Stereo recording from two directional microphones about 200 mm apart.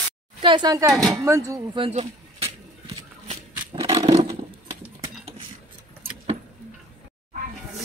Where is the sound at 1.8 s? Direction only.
30° right (ahead or behind).